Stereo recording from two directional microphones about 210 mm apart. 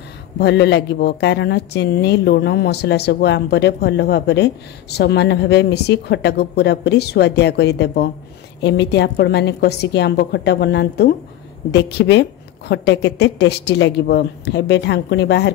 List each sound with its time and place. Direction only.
0.4 s a woman's voice: 55° left (ahead or behind)